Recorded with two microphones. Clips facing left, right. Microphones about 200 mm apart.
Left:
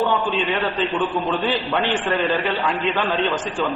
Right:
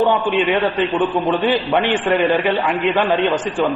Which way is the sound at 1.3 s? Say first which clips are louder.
Right 5 dB; 15° right (ahead or behind).